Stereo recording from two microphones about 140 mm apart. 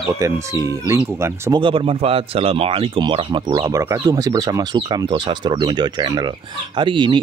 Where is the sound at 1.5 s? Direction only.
40° right (ahead or behind).